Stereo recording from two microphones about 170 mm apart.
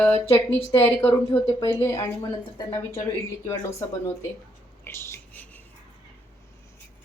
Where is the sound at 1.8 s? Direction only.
20° left (ahead or behind).